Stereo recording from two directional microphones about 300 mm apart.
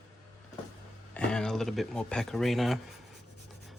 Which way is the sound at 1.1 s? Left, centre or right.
Centre.